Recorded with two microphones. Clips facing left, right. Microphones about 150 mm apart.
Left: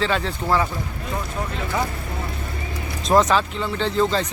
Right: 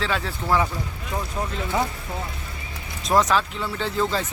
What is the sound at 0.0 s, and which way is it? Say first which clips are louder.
Speech: left 4 dB; 5° right (ahead or behind).